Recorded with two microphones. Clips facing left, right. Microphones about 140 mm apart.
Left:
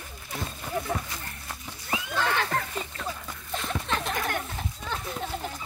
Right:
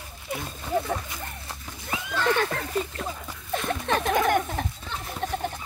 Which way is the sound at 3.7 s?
55° right (ahead or behind).